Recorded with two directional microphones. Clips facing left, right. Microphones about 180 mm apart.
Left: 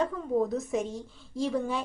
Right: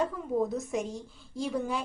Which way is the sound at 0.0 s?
Centre (ahead or behind).